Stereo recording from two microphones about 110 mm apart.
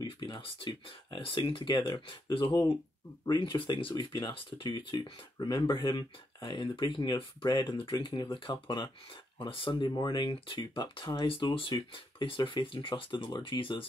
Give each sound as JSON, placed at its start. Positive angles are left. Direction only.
{"t": 0.0, "sound": "speech", "side_deg": 50}